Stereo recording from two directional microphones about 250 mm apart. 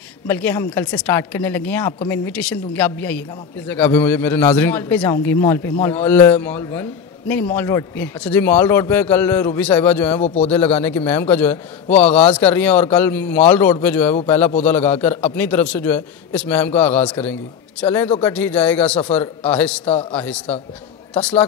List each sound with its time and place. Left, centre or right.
0.3 s a man's voice: centre
10.2 s speech: left
10.5 s a man's voice: centre